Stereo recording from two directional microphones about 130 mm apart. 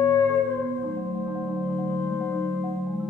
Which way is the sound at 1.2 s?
20° right (ahead or behind).